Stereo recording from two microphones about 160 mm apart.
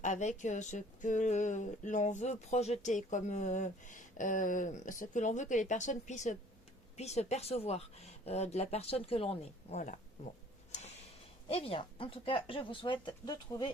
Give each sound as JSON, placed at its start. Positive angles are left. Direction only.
{"t": 0.0, "sound": "speech", "side_deg": 50}
{"t": 10.7, "sound": "a sound", "side_deg": 45}
{"t": 11.4, "sound": "speech", "side_deg": 35}